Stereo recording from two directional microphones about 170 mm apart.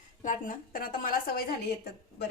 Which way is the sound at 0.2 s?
50° left (ahead or behind).